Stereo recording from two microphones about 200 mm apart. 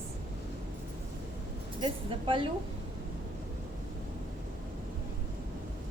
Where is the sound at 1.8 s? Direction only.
25° right (ahead or behind).